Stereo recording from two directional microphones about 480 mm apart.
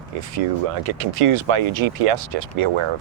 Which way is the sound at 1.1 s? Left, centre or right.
Right.